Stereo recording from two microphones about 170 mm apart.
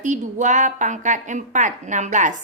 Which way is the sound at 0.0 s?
45° right (ahead or behind).